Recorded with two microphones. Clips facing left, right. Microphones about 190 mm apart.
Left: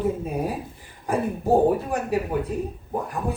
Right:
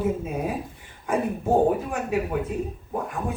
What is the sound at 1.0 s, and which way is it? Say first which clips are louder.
A woman's voice: left 2 dB; 35° left (ahead or behind).